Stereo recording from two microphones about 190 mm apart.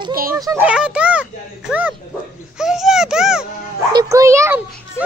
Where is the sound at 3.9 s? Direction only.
15° right (ahead or behind).